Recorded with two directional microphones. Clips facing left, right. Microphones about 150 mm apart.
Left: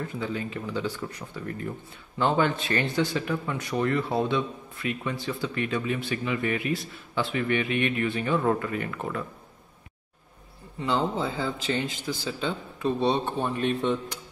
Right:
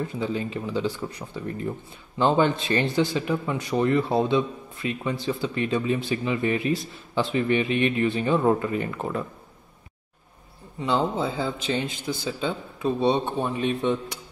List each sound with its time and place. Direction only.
0.0 s a man's voice: 25° right (ahead or behind)
10.8 s a man's voice: 5° right (ahead or behind)